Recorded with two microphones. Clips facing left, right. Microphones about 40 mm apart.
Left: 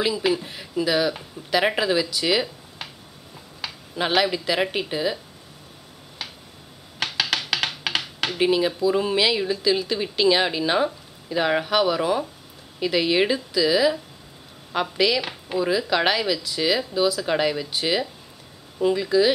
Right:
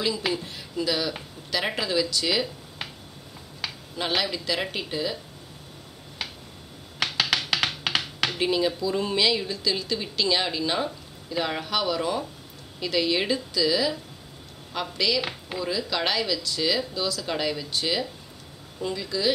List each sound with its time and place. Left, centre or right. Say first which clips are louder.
0.0 s speech: left 4 dB; centre
3.9 s speech: left 6 dB; centre
7.0 s computer keyboard: even; centre
8.4 s speech: left 5 dB; centre
15.2 s speech: left 5 dB; centre
15.6 s speech: left 6 dB; centre